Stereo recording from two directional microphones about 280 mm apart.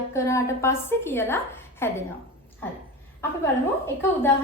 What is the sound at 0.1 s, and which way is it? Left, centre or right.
A woman's voice, centre.